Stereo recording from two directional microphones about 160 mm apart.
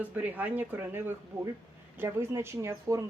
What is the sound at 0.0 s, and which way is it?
A man's voice, 10° right (ahead or behind).